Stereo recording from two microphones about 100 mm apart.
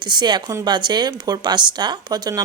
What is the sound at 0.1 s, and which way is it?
Speech, 50° right (ahead or behind).